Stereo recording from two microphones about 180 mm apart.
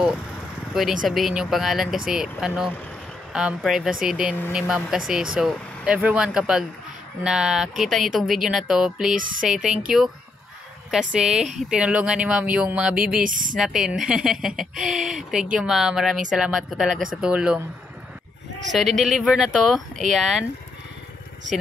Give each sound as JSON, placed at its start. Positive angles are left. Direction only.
{"t": 1.0, "sound": "speech", "side_deg": 0}
{"t": 10.9, "sound": "speech", "side_deg": -5}
{"t": 13.2, "sound": "speech", "side_deg": -50}
{"t": 13.6, "sound": "speech", "side_deg": 0}
{"t": 18.7, "sound": "speech", "side_deg": 0}